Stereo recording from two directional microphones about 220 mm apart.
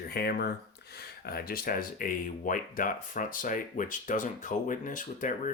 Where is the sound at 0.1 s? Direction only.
45° left (ahead or behind).